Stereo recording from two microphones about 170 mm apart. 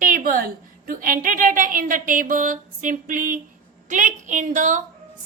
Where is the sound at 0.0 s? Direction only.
55° right (ahead or behind).